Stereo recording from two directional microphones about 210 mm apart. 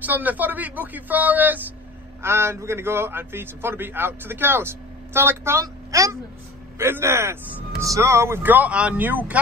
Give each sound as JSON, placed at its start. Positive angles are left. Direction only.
{"t": 0.0, "sound": "a man's voice", "side_deg": -10}